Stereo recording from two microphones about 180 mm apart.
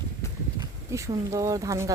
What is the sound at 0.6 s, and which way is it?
Speech, 15° right (ahead or behind).